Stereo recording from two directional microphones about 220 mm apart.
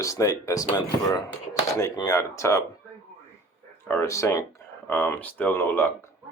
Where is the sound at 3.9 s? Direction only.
10° left (ahead or behind).